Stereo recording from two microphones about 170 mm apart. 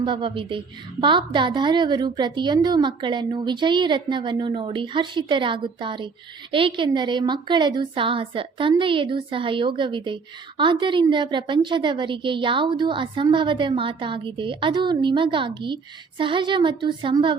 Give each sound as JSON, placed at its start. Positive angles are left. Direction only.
{"t": 0.0, "sound": "a woman's voice", "side_deg": -30}